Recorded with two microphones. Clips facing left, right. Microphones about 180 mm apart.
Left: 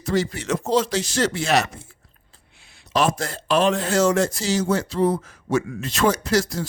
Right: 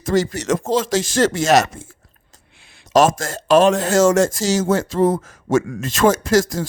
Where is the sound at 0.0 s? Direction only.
45° right (ahead or behind).